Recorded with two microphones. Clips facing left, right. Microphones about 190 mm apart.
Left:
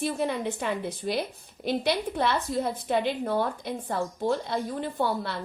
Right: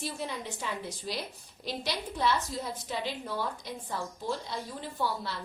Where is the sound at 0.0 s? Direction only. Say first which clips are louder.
Left 9 dB; 60° left (ahead or behind).